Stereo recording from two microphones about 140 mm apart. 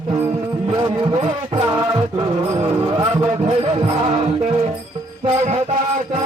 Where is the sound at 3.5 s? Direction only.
45° right (ahead or behind).